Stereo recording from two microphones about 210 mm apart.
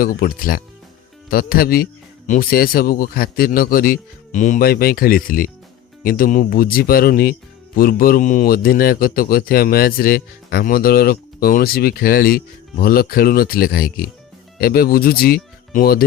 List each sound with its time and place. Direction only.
0.0 s a man's voice: 45° left (ahead or behind)